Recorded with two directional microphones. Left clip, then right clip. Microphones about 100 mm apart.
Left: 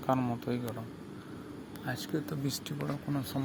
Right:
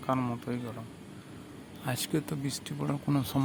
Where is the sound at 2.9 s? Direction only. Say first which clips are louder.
Right 7 dB; 30° right (ahead or behind).